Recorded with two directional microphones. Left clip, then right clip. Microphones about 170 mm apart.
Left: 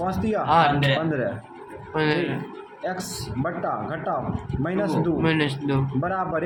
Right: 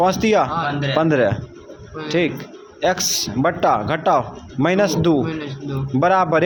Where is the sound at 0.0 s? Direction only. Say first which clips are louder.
Right 10 dB; 50° right (ahead or behind).